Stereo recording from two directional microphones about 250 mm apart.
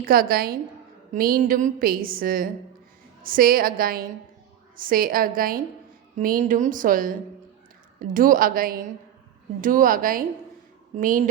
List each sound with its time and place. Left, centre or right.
0.0 s a woman's voice: right